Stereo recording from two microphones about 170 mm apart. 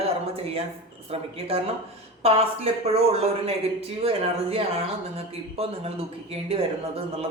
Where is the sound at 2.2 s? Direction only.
35° right (ahead or behind).